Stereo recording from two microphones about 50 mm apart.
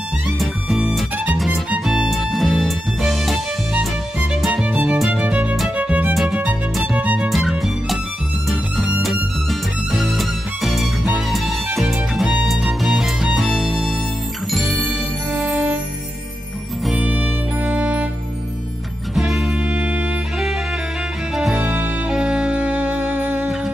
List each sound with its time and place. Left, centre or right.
1.1 s music: right
1.4 s music: centre
4.6 s music: right
7.2 s music: centre
9.0 s music: centre
14.9 s music: right
17.0 s music: right
19.1 s music: centre
19.7 s music: right
21.5 s music: right
22.1 s music: centre
22.8 s music: right